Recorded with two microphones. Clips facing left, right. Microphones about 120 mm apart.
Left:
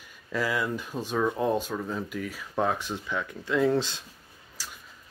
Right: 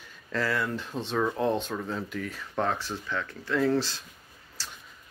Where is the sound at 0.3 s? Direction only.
10° left (ahead or behind).